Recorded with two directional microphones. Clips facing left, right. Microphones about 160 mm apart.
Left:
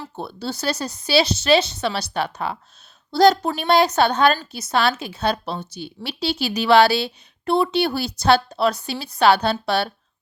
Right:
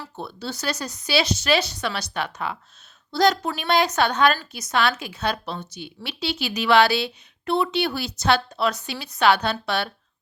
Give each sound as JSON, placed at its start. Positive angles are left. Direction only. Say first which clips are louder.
{"t": 0.2, "sound": "a woman's voice", "louder": "left 3 dB", "side_deg": 30}